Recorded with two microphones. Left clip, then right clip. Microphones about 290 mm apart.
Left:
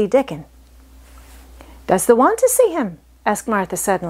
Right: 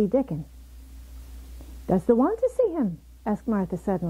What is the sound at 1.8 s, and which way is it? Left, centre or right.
A woman's voice, centre.